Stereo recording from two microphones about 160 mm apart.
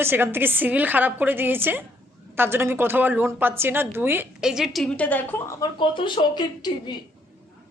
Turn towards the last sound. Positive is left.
turn(degrees=25)  # may be behind; listen again after turning